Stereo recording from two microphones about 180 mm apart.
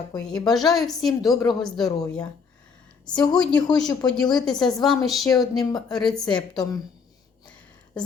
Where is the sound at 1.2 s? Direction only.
25° left (ahead or behind).